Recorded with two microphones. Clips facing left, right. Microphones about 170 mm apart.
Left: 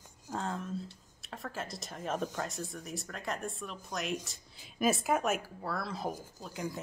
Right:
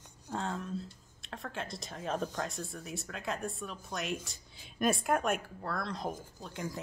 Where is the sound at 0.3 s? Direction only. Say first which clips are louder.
Even; centre (ahead or behind).